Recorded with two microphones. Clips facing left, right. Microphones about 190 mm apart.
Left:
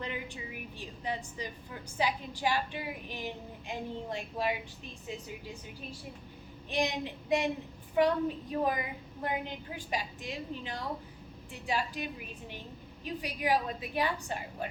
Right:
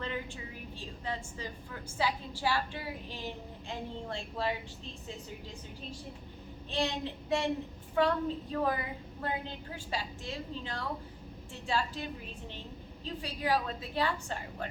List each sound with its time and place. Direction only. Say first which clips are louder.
0.0 s a woman's voice: right 1 dB; 15° left (ahead or behind)
6.7 s a woman's voice: left 1 dB; 15° left (ahead or behind)